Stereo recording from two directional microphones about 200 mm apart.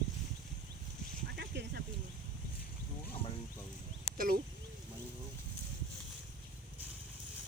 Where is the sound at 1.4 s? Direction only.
55° right (ahead or behind).